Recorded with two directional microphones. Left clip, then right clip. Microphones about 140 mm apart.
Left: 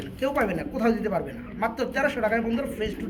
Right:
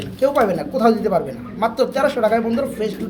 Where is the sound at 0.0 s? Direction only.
15° right (ahead or behind).